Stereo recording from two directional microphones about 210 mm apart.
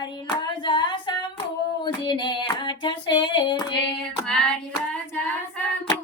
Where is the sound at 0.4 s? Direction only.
20° left (ahead or behind).